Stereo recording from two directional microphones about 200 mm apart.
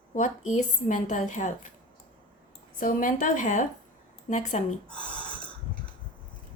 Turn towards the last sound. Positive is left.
turn(degrees=5)  # may be behind; listen again after turning